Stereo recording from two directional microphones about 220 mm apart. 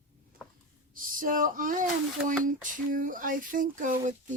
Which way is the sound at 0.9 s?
40° right (ahead or behind).